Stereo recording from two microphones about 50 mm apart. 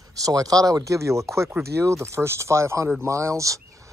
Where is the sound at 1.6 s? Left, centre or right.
Right.